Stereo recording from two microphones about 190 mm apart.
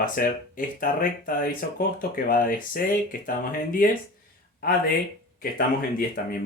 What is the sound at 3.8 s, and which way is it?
Speech, 45° left (ahead or behind).